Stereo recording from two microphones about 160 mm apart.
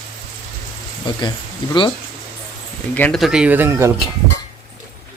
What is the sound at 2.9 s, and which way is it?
Speech, 10° left (ahead or behind).